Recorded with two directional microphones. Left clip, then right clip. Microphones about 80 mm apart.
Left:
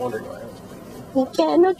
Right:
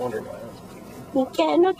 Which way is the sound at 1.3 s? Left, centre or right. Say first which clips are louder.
Left 2 dB; left.